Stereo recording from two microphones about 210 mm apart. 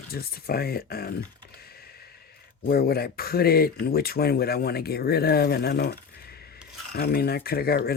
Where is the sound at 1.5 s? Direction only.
45° left (ahead or behind).